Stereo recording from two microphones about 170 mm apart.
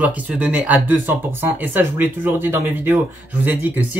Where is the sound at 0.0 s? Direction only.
10° right (ahead or behind).